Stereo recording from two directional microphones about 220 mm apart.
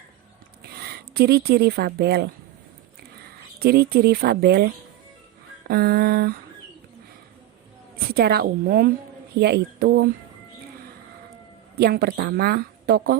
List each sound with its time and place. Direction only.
0.8 s speech: 45° right (ahead or behind)
3.6 s a woman's voice: 45° right (ahead or behind)
7.9 s a woman's voice: 45° right (ahead or behind)
11.8 s a woman's voice: 45° right (ahead or behind)